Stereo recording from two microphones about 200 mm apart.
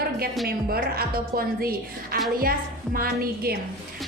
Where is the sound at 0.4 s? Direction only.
50° right (ahead or behind).